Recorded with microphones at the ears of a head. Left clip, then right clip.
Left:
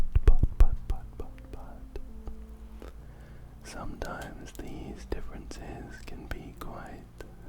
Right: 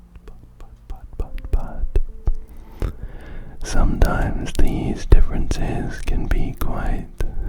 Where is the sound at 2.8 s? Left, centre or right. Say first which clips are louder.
Right 16 dB; right.